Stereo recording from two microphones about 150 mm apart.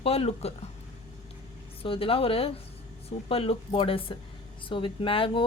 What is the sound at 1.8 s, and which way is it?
Speech, 35° left (ahead or behind).